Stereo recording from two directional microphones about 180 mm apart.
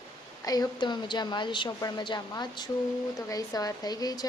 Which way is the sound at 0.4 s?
20° left (ahead or behind).